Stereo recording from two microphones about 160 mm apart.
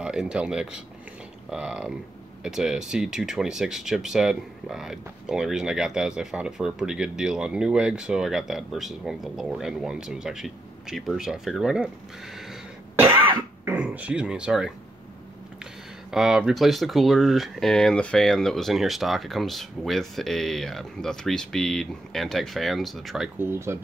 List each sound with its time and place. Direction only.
0.0 s speech: 5° right (ahead or behind)
12.9 s cough: 15° right (ahead or behind)
13.7 s speech: 10° right (ahead or behind)
16.1 s speech: 5° right (ahead or behind)
23.4 s speech: 15° right (ahead or behind)